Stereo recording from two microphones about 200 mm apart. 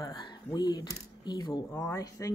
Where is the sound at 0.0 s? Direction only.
20° left (ahead or behind).